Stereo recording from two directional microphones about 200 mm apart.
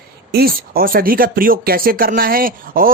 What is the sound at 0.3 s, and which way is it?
Speech, 50° right (ahead or behind).